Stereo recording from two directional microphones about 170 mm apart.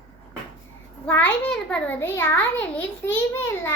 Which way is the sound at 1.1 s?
10° left (ahead or behind).